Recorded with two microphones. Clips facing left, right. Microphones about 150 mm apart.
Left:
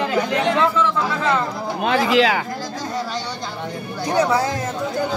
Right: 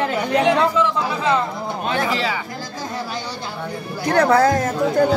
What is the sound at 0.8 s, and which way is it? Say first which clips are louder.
Speech: right 1 dB; 15° right (ahead or behind).